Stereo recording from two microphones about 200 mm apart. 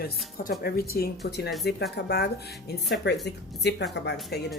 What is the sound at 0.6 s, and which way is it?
A woman's voice, 50° left (ahead or behind).